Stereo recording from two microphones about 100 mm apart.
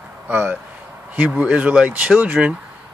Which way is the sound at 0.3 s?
20° right (ahead or behind).